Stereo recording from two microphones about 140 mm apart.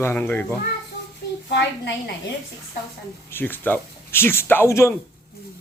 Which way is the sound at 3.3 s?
15° left (ahead or behind).